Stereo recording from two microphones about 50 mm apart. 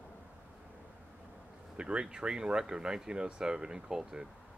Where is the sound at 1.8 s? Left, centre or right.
Centre.